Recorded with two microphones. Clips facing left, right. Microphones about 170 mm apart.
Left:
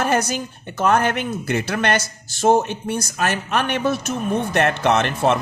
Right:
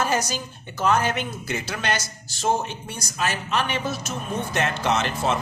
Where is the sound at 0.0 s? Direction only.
60° left (ahead or behind).